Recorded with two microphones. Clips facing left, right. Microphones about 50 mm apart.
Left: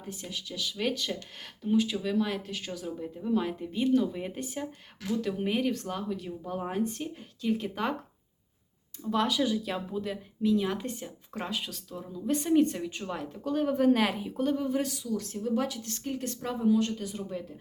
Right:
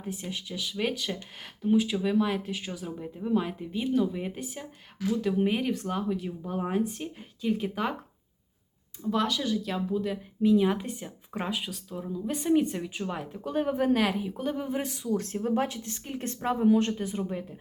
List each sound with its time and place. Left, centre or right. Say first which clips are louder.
0.0 s speech: right 3 dB; centre
9.0 s speech: even; centre
10.4 s speech: right 4 dB; centre
13.9 s speech: right 1 dB; centre
14.5 s a woman's voice: left 2 dB; right
15.9 s speech: left 3 dB; centre
16.1 s speech: right 6 dB; right